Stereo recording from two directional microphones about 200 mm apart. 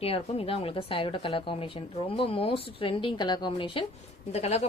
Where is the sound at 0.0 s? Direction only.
30° left (ahead or behind).